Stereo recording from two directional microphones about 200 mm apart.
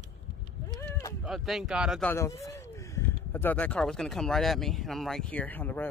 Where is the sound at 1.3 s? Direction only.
Centre (ahead or behind).